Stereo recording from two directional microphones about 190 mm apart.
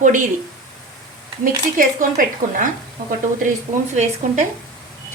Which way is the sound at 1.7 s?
45° right (ahead or behind).